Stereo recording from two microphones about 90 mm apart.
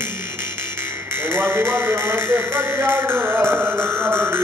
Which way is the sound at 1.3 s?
25° right (ahead or behind).